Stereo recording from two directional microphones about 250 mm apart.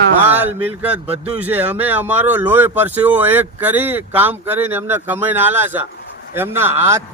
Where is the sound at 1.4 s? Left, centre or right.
Centre.